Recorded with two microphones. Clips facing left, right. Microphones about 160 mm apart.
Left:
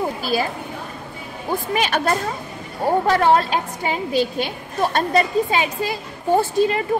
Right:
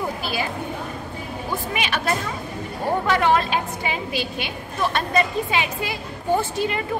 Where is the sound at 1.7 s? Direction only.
40° left (ahead or behind).